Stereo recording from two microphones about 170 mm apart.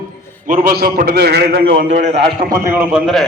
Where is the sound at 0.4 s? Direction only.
55° right (ahead or behind); by 2.5 s 35° right (ahead or behind).